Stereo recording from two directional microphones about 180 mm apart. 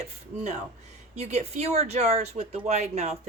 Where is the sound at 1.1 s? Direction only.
40° right (ahead or behind).